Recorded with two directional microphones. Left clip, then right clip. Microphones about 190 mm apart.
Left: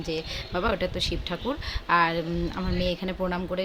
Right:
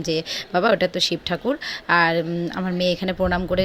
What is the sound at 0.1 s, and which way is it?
A woman's voice, 30° right (ahead or behind).